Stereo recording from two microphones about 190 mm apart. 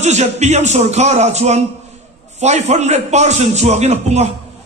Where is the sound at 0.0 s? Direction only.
35° right (ahead or behind).